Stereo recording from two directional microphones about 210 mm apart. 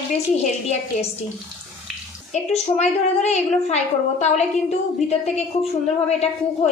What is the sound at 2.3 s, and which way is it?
A woman's voice, 30° left (ahead or behind).